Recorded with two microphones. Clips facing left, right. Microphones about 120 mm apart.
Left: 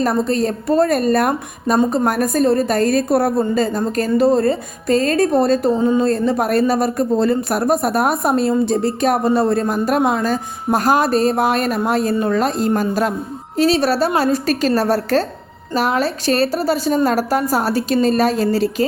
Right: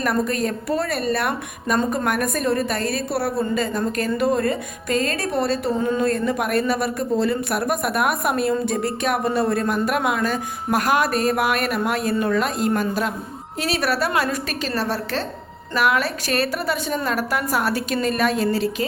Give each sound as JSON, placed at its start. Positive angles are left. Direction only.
{"t": 0.0, "sound": "speech", "side_deg": 30}
{"t": 5.8, "sound": "speech", "side_deg": 25}
{"t": 13.6, "sound": "speech", "side_deg": 30}
{"t": 15.7, "sound": "speech", "side_deg": 30}